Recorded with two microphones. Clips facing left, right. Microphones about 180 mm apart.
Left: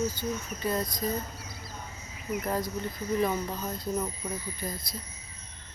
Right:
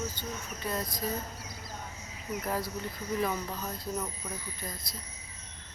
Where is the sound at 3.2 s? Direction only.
5° left (ahead or behind).